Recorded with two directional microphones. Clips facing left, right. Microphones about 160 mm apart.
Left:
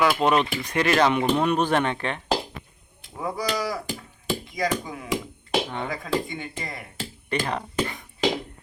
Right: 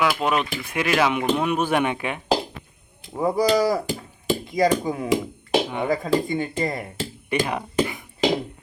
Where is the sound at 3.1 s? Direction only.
35° right (ahead or behind).